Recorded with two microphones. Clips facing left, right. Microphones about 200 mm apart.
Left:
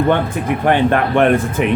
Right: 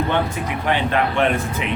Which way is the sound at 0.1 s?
50° left (ahead or behind).